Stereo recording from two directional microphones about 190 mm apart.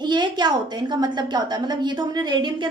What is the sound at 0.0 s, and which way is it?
A woman's voice, 25° right (ahead or behind).